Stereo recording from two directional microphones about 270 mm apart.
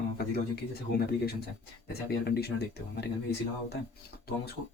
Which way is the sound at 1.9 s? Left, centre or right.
Left.